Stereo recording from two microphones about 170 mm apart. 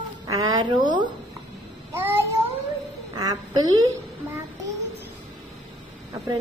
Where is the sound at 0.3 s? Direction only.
25° right (ahead or behind).